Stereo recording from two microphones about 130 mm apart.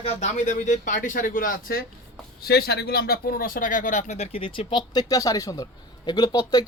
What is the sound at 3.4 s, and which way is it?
Speech, 90° left.